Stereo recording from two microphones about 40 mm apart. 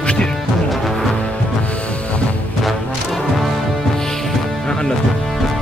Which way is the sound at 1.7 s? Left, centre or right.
Left.